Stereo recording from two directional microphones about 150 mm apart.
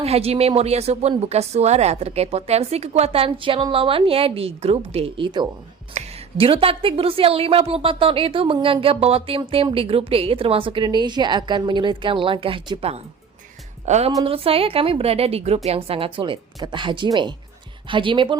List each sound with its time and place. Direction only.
0.0 s a woman's voice: 40° right (ahead or behind)
13.8 s speech: 50° right (ahead or behind)
14.3 s a woman's voice: 40° right (ahead or behind)